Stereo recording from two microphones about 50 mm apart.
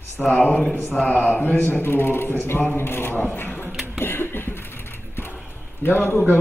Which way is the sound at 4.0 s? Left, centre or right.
Left.